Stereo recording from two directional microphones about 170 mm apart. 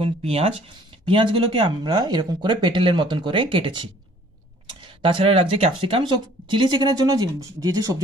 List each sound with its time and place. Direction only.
0.0 s speech: 35° right (ahead or behind)